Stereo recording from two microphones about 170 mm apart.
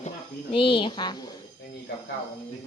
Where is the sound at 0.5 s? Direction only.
30° left (ahead or behind).